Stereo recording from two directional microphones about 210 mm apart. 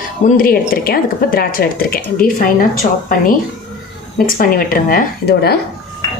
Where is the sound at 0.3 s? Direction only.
45° left (ahead or behind).